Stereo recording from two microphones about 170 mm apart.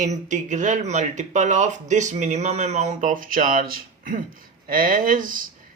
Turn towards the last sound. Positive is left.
turn(degrees=-55)  # may be behind; listen again after turning